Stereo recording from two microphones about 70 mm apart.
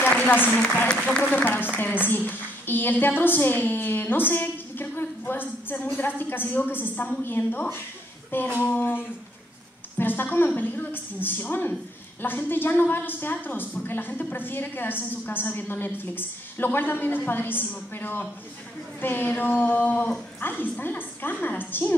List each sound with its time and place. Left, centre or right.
0.0 s speech: left
0.8 s speech: centre
1.3 s a woman's voice: left
8.3 s a sound: left
8.6 s a woman's voice: left